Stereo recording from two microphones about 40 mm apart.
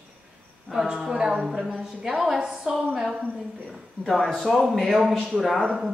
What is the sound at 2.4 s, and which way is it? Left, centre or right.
Speech, right.